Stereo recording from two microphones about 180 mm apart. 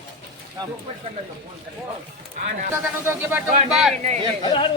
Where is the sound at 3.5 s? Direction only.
45° right (ahead or behind).